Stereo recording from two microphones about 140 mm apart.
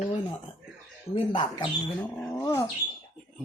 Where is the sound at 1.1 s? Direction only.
35° left (ahead or behind).